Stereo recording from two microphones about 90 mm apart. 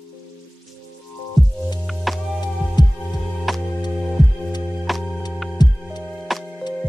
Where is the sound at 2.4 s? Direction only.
50° left (ahead or behind).